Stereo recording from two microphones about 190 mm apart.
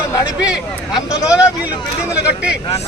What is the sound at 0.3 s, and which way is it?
Speech, 5° right (ahead or behind).